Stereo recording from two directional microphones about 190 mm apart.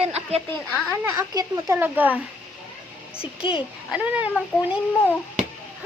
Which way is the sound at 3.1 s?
30° left (ahead or behind).